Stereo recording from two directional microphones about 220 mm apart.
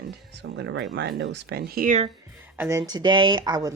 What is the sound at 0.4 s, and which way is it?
Speech, 55° right (ahead or behind).